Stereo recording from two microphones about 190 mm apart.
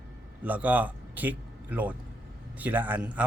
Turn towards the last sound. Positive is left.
turn(degrees=-5)  # may be behind; listen again after turning